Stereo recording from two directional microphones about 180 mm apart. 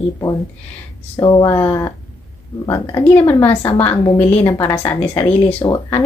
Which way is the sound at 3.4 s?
30° left (ahead or behind).